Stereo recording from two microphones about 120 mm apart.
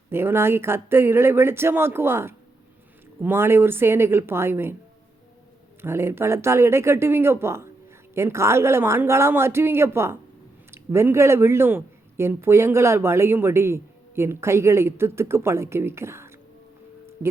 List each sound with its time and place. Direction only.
0.1 s speech: 20° right (ahead or behind)
5.8 s speech: 20° right (ahead or behind)